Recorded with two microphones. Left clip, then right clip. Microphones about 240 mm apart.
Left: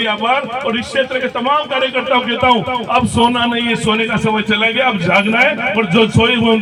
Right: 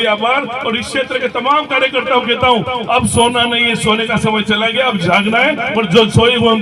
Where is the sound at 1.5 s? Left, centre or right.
Right.